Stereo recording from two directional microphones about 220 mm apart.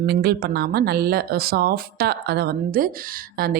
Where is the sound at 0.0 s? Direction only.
45° right (ahead or behind).